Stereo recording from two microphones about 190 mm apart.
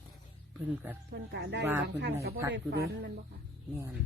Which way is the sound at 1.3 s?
65° right (ahead or behind).